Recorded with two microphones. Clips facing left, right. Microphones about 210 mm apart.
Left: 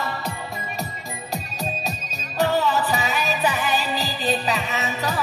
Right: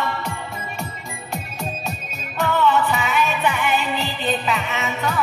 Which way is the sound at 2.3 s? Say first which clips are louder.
Right 2 dB; 35° left (ahead or behind).